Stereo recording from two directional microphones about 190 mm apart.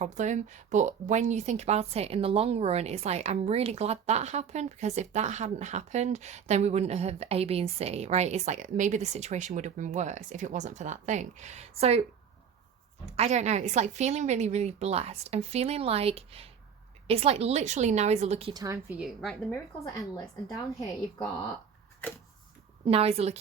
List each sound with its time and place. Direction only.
0.0 s speech: 40° right (ahead or behind)
13.1 s speech: 35° right (ahead or behind)
18.9 s a woman's voice: centre (ahead or behind)
19.8 s a woman's voice: 15° left (ahead or behind)
22.9 s speech: 30° right (ahead or behind)